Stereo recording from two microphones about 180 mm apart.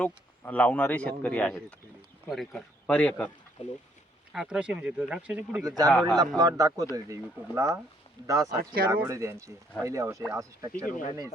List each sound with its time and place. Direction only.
0.0 s speech: 10° left (ahead or behind)
4.3 s speech: 5° right (ahead or behind)
5.9 s speech: 5° left (ahead or behind)
6.1 s speech: 20° right (ahead or behind)
8.4 s speech: 55° right (ahead or behind)
8.9 s speech: 15° right (ahead or behind)
10.8 s speech: 45° left (ahead or behind)